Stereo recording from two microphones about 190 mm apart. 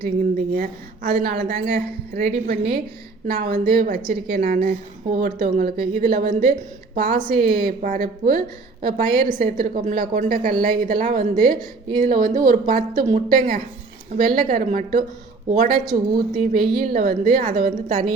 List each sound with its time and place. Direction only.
0.0 s a woman's voice: 50° right (ahead or behind)